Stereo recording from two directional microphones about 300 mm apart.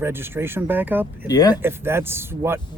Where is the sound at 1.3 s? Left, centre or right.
Centre.